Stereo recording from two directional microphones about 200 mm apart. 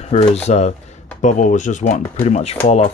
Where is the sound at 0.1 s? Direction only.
30° left (ahead or behind).